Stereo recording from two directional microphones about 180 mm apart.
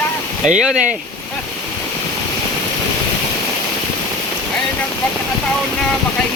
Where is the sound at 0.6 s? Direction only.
5° right (ahead or behind).